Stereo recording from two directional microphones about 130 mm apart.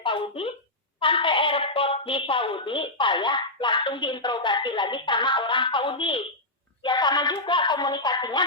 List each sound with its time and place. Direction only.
0.0 s speech: 45° left (ahead or behind)